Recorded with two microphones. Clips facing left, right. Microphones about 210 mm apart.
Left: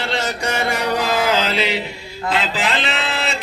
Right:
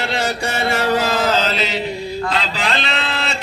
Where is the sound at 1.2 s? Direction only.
10° left (ahead or behind).